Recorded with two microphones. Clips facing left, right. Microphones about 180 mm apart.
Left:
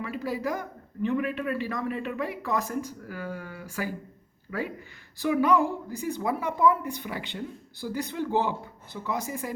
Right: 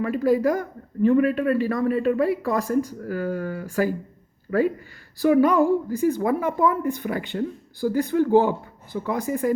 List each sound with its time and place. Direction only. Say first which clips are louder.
0.0 s a man's voice: right 11 dB; 50° right (ahead or behind)